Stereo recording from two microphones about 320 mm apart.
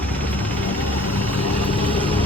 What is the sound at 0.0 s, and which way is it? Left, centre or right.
Vehicle, centre.